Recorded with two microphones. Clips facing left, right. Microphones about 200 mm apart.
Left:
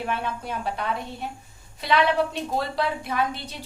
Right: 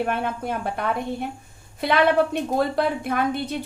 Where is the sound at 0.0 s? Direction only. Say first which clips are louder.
Right 4 dB; 55° right (ahead or behind).